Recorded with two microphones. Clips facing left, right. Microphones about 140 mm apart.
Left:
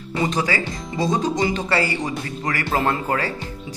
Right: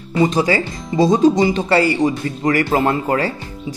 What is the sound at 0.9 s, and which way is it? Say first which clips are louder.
Speech: right 9 dB; 30° right (ahead or behind).